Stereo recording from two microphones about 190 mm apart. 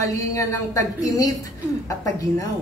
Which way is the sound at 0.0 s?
15° left (ahead or behind).